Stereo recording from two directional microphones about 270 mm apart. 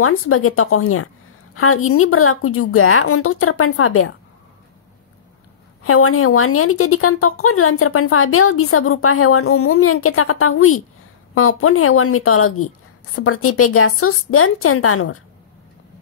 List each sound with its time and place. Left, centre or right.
0.0 s a woman's voice: left
5.9 s a woman's voice: left